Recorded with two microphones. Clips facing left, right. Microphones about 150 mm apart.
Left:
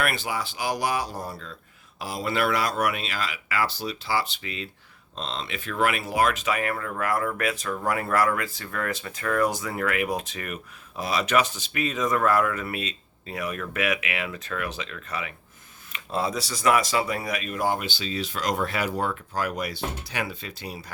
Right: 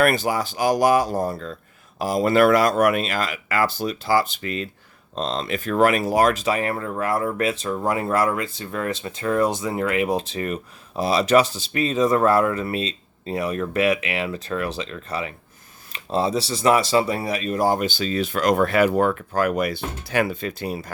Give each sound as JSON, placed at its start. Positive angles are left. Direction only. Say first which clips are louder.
{"t": 0.0, "sound": "speech", "louder": "right 8 dB", "side_deg": -45}